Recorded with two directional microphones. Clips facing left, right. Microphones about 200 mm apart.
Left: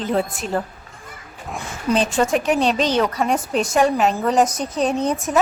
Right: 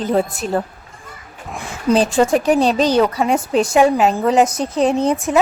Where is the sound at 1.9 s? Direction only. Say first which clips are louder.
Right 4 dB; 30° right (ahead or behind).